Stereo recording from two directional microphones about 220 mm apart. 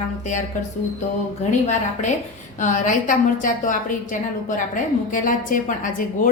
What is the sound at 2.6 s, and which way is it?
A woman's voice, 35° left (ahead or behind).